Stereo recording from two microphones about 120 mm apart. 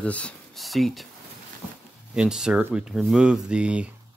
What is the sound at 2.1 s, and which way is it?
Speech, 5° right (ahead or behind).